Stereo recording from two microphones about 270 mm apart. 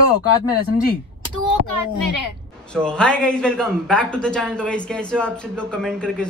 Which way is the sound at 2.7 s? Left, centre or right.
Centre.